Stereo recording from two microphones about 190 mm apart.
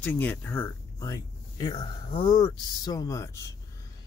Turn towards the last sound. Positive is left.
turn(degrees=15)  # may be behind; listen again after turning